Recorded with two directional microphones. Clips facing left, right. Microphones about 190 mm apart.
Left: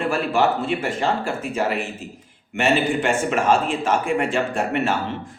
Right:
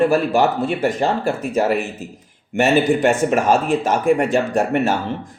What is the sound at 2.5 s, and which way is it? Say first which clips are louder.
A man's voice: right 4 dB; 40° right (ahead or behind).